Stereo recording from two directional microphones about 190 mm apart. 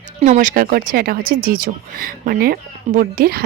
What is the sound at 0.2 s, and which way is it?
Speech, 40° right (ahead or behind).